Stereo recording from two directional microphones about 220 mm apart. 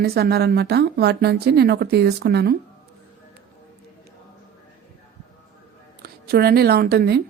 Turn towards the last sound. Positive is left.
turn(degrees=-45)  # may be behind; listen again after turning